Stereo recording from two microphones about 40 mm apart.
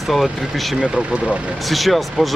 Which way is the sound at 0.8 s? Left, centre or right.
Right.